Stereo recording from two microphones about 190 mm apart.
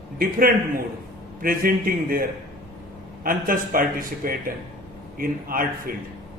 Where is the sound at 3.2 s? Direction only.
45° right (ahead or behind).